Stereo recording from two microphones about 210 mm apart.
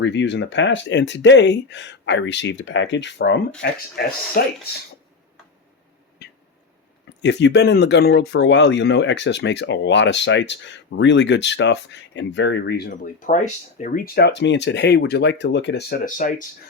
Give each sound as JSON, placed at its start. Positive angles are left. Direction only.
{"t": 0.0, "sound": "speech", "side_deg": 60}
{"t": 6.2, "sound": "a sound", "side_deg": 50}
{"t": 7.2, "sound": "speech", "side_deg": 55}